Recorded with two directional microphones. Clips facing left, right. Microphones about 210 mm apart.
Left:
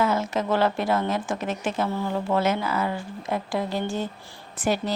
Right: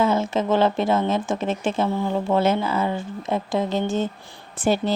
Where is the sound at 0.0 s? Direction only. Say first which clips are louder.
Right 3 dB; 25° right (ahead or behind).